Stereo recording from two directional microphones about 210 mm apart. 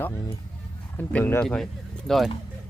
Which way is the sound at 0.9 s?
10° left (ahead or behind).